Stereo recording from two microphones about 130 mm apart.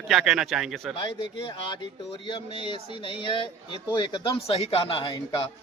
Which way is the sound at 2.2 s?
40° left (ahead or behind).